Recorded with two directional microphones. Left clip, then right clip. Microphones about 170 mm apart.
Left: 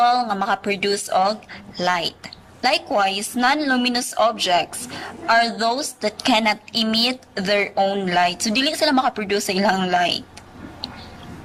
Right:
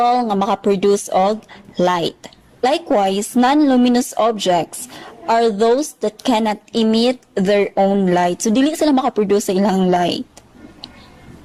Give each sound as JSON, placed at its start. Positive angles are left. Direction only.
{"t": 0.0, "sound": "speech", "side_deg": -30}